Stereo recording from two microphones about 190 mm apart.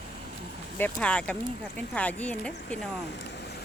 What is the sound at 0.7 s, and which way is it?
Speech, 10° left (ahead or behind).